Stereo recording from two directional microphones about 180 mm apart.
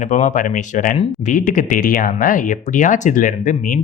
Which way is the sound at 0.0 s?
40° left (ahead or behind).